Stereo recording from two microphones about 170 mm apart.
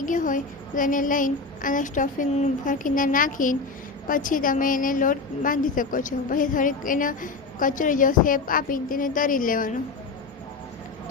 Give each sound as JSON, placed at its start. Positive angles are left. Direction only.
{"t": 0.0, "sound": "a woman's voice", "side_deg": 50}